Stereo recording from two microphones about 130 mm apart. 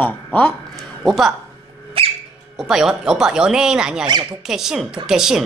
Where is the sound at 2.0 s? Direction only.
45° right (ahead or behind).